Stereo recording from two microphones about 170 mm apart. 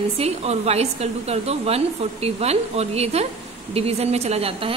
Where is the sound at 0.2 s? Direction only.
40° right (ahead or behind).